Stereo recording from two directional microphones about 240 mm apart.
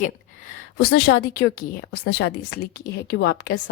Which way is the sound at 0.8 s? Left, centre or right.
Left.